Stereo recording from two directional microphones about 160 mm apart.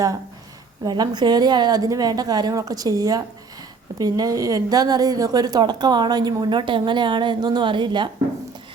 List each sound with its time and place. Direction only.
0.9 s a woman's voice: 25° right (ahead or behind)